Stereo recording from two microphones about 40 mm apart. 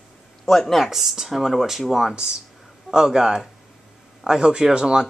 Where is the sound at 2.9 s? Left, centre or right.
Centre.